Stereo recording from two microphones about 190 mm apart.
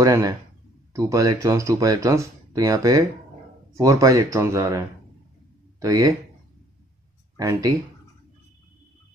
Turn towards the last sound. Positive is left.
turn(degrees=-20)  # may be behind; listen again after turning